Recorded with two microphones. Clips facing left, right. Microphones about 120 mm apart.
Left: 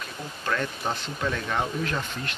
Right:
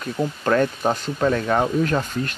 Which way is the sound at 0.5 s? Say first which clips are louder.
Right 8 dB; 45° right (ahead or behind).